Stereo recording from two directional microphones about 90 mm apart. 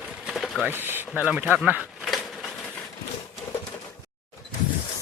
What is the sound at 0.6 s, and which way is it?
Chopping, 25° right (ahead or behind).